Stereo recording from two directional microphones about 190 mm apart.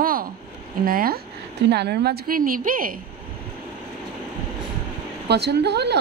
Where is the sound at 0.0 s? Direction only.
50° right (ahead or behind).